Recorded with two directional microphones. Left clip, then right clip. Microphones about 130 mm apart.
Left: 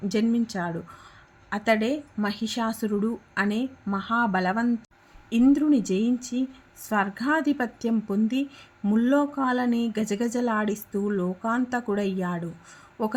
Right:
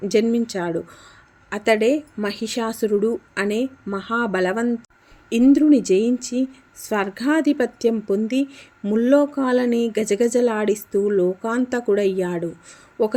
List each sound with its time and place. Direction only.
0.1 s a woman's voice: 40° right (ahead or behind)